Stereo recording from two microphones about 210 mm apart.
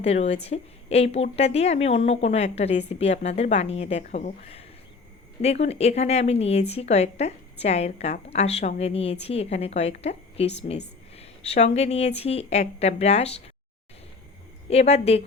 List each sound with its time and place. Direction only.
0.0 s a woman's voice: 30° left (ahead or behind)
14.7 s a woman's voice: 30° left (ahead or behind)